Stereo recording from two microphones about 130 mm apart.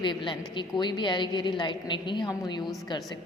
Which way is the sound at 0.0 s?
40° left (ahead or behind).